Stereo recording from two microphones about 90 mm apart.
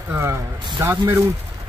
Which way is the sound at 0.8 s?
30° right (ahead or behind).